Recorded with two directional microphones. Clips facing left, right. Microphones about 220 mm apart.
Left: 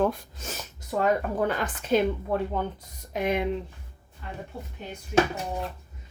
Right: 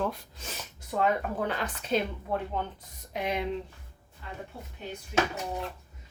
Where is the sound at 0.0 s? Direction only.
45° left (ahead or behind).